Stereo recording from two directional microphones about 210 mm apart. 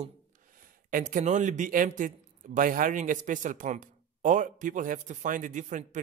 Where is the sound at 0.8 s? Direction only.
40° right (ahead or behind).